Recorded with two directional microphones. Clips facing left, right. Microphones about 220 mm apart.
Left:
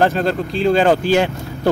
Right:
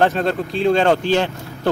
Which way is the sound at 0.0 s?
Centre (ahead or behind).